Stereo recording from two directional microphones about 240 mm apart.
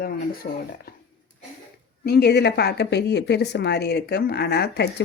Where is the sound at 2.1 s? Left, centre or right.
Left.